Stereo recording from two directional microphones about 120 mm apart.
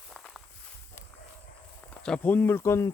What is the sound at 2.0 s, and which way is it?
Speech, 10° left (ahead or behind).